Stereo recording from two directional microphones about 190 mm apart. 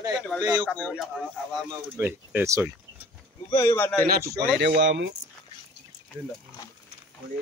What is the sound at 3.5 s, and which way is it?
Speech, 15° left (ahead or behind).